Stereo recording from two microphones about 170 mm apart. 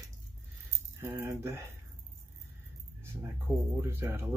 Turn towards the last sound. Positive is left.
turn(degrees=-15)  # may be behind; listen again after turning